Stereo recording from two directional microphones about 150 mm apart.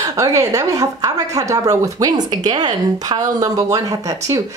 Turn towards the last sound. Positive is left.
turn(degrees=-25)  # may be behind; listen again after turning